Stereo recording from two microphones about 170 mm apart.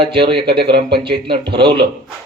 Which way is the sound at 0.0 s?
30° right (ahead or behind).